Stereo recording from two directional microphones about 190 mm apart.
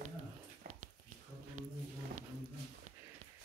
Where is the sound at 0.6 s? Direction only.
50° right (ahead or behind).